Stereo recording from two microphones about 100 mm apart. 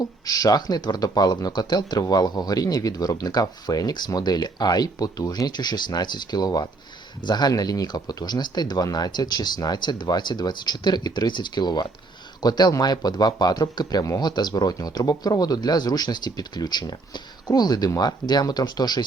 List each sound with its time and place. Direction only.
0.3 s speech: 40° left (ahead or behind)